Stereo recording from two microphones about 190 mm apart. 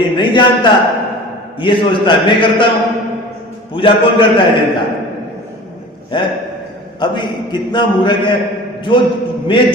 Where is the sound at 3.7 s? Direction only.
25° left (ahead or behind).